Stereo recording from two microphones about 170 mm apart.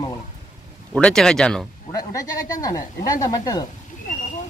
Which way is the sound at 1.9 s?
20° left (ahead or behind).